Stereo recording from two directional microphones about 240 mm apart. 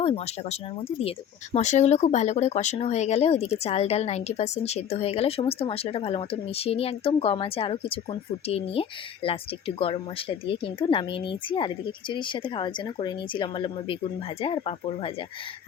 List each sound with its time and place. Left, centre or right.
0.0 s speech: left